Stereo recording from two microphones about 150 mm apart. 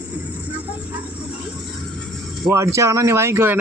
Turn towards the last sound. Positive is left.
turn(degrees=-15)  # may be behind; listen again after turning